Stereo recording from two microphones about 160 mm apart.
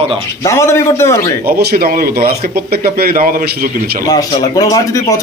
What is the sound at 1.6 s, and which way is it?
A man's voice, 70° right (ahead or behind).